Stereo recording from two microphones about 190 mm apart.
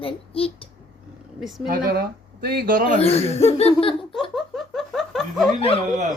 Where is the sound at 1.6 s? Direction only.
50° right (ahead or behind).